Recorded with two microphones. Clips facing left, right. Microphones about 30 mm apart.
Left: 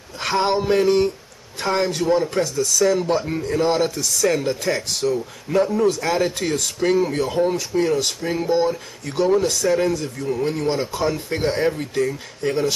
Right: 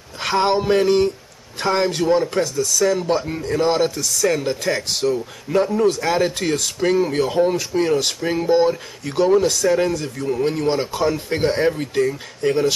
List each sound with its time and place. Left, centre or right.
0.2 s speech: centre
3.4 s speech: centre
4.0 s speech: centre
4.5 s speech: centre
9.1 s speech: centre
10.7 s speech: right